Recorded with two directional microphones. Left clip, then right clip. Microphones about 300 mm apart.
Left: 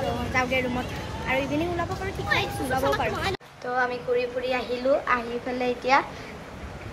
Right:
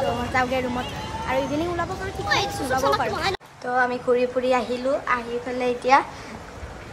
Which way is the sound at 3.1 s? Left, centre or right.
Right.